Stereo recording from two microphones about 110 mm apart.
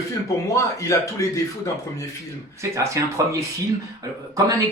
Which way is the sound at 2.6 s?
25° right (ahead or behind).